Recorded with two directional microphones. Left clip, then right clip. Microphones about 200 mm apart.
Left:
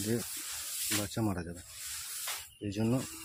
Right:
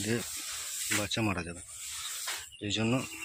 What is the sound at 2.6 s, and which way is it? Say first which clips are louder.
Speech: right 3 dB; 15° left (ahead or behind).